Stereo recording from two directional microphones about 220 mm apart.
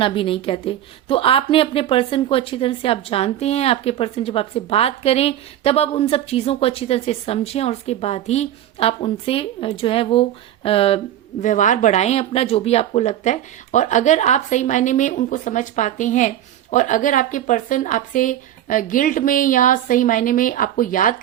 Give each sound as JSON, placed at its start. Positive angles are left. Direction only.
{"t": 0.0, "sound": "a woman's voice", "side_deg": 25}